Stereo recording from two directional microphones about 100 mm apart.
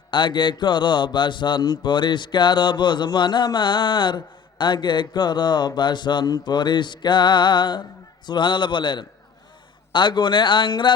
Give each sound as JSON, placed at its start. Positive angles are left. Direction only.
{"t": 0.1, "sound": "mantra", "side_deg": 50}